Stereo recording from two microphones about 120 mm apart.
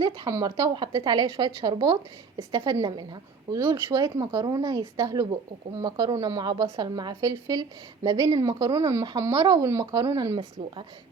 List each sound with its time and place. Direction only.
0.0 s speech: 20° right (ahead or behind)
3.8 s speech: 30° right (ahead or behind)